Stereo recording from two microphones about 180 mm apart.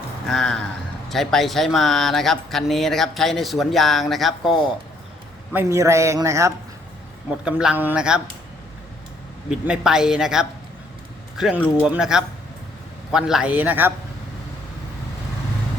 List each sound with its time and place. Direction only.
0.3 s speech: centre (ahead or behind)
5.5 s speech: 15° right (ahead or behind)
7.4 s speech: 5° right (ahead or behind)
9.5 s speech: 5° right (ahead or behind)